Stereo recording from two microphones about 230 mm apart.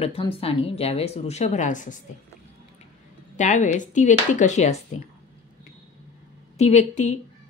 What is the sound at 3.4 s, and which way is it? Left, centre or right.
Speech, left.